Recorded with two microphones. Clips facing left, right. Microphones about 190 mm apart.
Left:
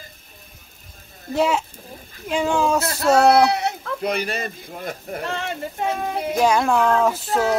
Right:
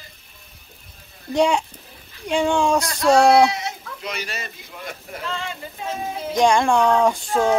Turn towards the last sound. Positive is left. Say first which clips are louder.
# right 1 dB
turn(degrees=5)  # may be behind; listen again after turning